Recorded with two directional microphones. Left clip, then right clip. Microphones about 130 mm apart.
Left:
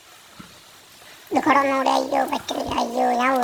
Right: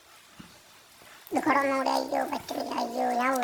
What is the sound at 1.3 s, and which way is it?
Speech, 5° left (ahead or behind).